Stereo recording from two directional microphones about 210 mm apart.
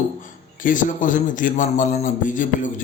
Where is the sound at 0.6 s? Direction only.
40° left (ahead or behind).